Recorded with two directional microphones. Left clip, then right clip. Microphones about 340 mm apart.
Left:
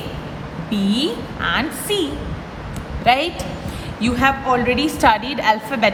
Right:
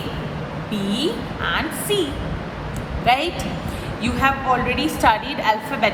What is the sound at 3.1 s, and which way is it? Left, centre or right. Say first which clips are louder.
A woman's voice: left 2 dB; left.